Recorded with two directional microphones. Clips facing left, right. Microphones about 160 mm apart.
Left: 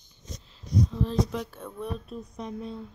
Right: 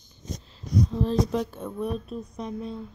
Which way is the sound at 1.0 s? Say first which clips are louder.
Right 4 dB; 35° right (ahead or behind).